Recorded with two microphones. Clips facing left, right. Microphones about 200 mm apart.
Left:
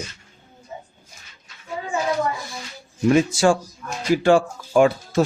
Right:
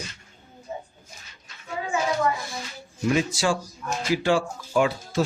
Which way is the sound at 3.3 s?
50° left (ahead or behind).